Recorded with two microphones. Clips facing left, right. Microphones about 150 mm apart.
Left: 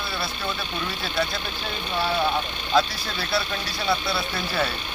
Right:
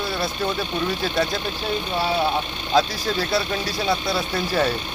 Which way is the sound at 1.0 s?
40° right (ahead or behind).